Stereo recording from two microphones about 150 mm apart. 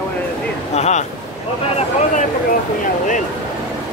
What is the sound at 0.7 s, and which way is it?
Speech, 50° left (ahead or behind).